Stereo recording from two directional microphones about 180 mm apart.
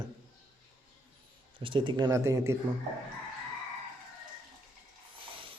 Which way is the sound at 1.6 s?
30° right (ahead or behind).